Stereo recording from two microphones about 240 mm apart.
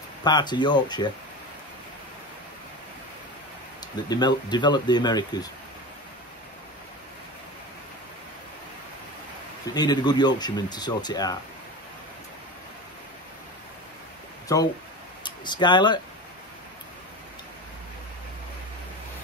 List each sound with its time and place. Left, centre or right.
0.2 s speech: centre
4.1 s speech: centre
9.8 s speech: centre
14.5 s speech: centre